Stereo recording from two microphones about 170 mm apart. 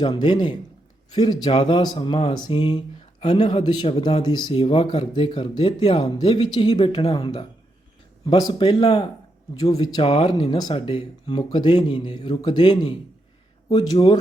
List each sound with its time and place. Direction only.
0.0 s speech: 25° left (ahead or behind)